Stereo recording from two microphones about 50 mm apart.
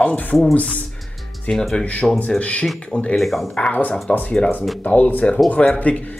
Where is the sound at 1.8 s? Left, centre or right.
Left.